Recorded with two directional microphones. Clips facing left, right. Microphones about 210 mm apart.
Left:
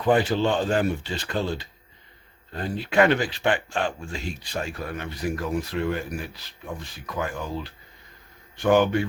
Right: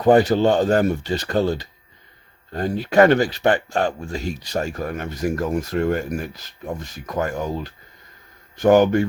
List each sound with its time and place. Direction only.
0.0 s speech: 40° right (ahead or behind)